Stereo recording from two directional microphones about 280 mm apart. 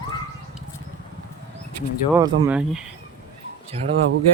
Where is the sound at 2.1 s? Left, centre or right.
Centre.